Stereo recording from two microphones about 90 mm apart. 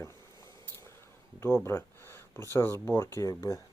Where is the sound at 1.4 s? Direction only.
30° left (ahead or behind).